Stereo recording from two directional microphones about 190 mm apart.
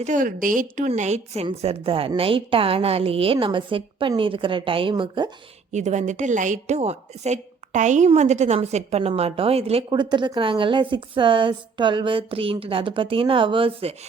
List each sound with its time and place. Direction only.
0.0 s a woman's voice: 45° right (ahead or behind); by 5.3 s 25° right (ahead or behind)
5.7 s a woman's voice: 40° right (ahead or behind)